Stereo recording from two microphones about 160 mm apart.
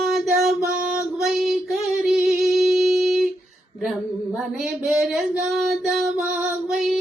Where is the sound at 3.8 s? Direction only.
Centre (ahead or behind).